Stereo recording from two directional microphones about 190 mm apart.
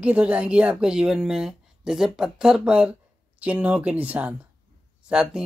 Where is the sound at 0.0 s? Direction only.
5° right (ahead or behind).